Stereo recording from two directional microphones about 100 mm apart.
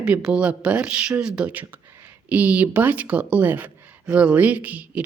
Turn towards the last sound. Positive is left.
turn(degrees=-15)  # may be behind; listen again after turning